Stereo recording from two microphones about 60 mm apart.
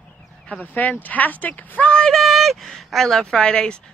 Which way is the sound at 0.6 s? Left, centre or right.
Left.